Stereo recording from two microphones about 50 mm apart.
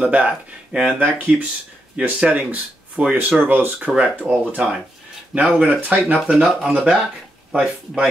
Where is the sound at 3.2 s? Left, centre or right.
Right.